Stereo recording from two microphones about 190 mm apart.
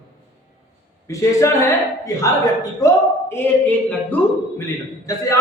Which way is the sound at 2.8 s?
15° left (ahead or behind).